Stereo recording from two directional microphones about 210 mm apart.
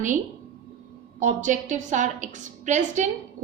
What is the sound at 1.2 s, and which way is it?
A woman's voice, 35° right (ahead or behind).